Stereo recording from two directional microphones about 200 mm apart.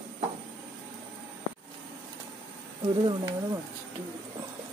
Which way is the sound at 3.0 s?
25° right (ahead or behind).